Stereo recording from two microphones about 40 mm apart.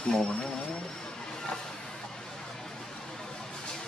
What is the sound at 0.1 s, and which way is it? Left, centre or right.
Speech, centre.